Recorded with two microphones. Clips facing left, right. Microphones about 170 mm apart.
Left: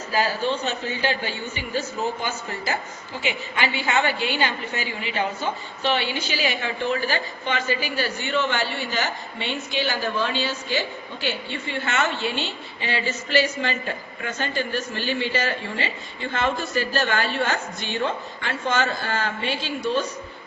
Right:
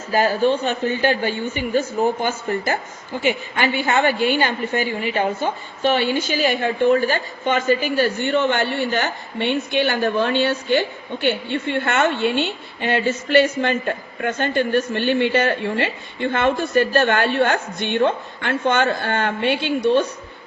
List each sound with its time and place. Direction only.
0.1 s a woman's voice: 50° right (ahead or behind)